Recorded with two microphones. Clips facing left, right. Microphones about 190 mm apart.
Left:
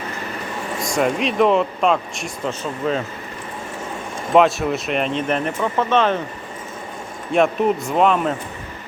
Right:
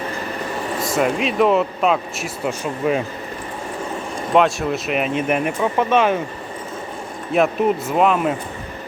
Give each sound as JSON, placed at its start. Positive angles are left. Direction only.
{"t": 0.8, "sound": "speech", "side_deg": -5}
{"t": 4.4, "sound": "speech", "side_deg": 0}
{"t": 7.3, "sound": "speech", "side_deg": 0}